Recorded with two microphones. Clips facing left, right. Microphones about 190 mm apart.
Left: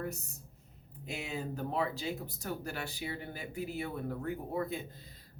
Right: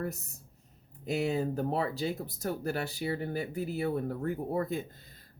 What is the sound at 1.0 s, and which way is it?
Speech, 40° right (ahead or behind).